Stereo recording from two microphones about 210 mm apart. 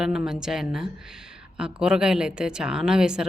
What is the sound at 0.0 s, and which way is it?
A woman's voice, 5° right (ahead or behind).